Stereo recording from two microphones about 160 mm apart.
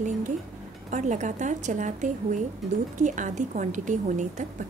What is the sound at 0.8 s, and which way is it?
A woman's voice, 50° right (ahead or behind).